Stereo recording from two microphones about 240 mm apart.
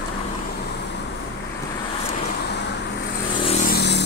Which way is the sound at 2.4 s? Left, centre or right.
Left.